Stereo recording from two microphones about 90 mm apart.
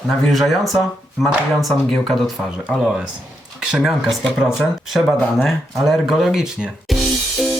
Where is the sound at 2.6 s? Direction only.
10° right (ahead or behind).